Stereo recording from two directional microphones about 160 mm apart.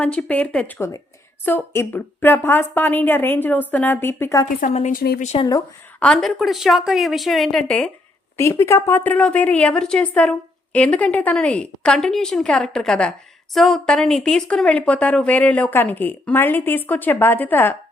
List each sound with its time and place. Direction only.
0.0 s a woman's voice: 5° left (ahead or behind)
4.6 s a woman's voice: 50° left (ahead or behind)
4.9 s speech: 70° left (ahead or behind)
5.4 s speech: 25° left (ahead or behind)
6.0 s a woman's voice: 5° left (ahead or behind)
8.4 s a woman's voice: 15° left (ahead or behind)